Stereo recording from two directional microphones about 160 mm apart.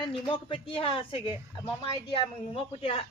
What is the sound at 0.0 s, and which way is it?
Speech, 30° left (ahead or behind).